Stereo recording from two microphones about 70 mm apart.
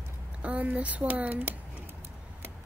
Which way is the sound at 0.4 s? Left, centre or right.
Right.